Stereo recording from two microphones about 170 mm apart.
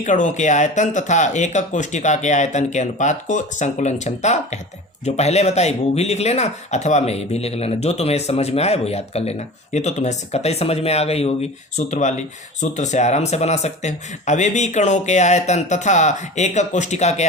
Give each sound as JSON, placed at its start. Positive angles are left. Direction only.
{"t": 0.0, "sound": "speech", "side_deg": 45}